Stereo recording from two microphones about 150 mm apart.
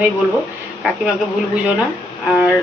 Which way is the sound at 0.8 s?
5° right (ahead or behind).